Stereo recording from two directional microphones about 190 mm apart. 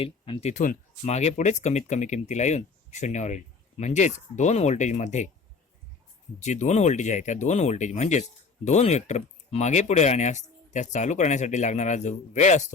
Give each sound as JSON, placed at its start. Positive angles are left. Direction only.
{"t": 0.0, "sound": "speech", "side_deg": 30}
{"t": 6.4, "sound": "speech", "side_deg": 40}